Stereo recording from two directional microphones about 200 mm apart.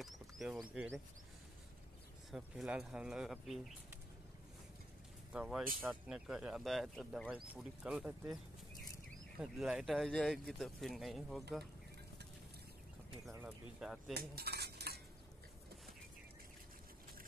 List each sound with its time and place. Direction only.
0.0 s a sound: centre (ahead or behind)
2.3 s speech: 5° right (ahead or behind)
5.3 s speech: 5° right (ahead or behind)
9.4 s speech: 5° right (ahead or behind)
13.5 s speech: centre (ahead or behind)
14.1 s cutlery: 50° right (ahead or behind)